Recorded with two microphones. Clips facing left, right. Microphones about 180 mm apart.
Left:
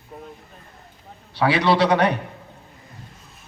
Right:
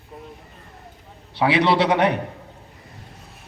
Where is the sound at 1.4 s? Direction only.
25° right (ahead or behind).